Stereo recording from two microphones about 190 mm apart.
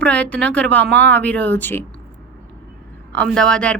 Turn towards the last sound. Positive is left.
turn(degrees=5)  # may be behind; listen again after turning